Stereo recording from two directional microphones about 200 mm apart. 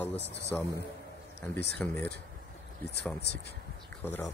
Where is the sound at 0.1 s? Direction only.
60° left (ahead or behind).